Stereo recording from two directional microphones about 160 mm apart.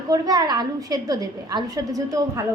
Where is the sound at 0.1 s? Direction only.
25° right (ahead or behind).